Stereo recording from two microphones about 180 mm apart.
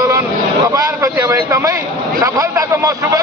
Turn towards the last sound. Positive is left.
turn(degrees=-15)  # may be behind; listen again after turning